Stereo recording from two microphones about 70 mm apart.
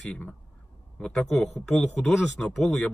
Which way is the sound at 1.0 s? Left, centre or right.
Centre.